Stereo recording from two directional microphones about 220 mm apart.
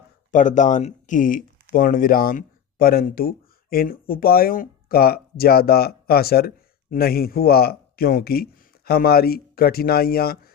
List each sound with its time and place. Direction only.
0.3 s speech: 35° left (ahead or behind)